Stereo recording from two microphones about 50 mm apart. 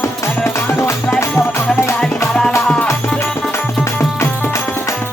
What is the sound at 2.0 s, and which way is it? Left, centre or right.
Music, centre.